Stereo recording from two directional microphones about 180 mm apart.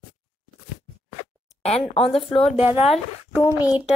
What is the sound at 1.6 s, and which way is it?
Speech, 35° left (ahead or behind).